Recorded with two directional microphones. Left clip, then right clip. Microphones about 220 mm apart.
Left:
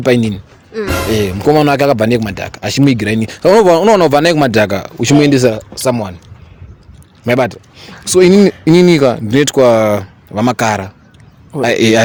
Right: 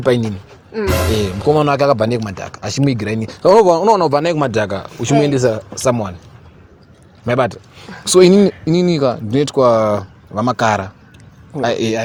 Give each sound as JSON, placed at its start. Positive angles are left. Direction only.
{"t": 0.0, "sound": "speech", "side_deg": 35}
{"t": 5.8, "sound": "a man's voice", "side_deg": 15}
{"t": 7.3, "sound": "speech", "side_deg": 25}
{"t": 8.0, "sound": "speech", "side_deg": 0}
{"t": 8.5, "sound": "speech", "side_deg": 35}
{"t": 10.6, "sound": "a man's voice", "side_deg": 20}
{"t": 11.6, "sound": "speech", "side_deg": 30}